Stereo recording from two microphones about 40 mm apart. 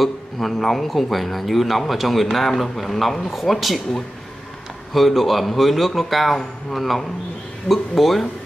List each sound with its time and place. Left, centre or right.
0.0 s a man's voice: centre
4.9 s a man's voice: centre